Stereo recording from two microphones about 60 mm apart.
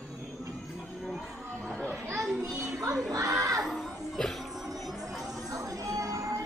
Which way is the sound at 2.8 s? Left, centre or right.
Right.